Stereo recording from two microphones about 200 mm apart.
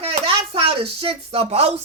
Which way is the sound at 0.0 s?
25° right (ahead or behind).